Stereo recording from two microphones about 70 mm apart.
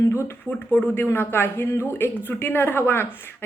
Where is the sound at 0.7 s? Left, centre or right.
Left.